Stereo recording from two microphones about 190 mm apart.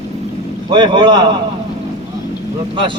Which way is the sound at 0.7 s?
25° right (ahead or behind).